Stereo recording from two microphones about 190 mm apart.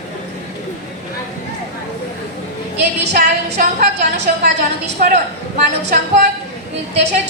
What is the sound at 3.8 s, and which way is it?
Speech, 60° right (ahead or behind).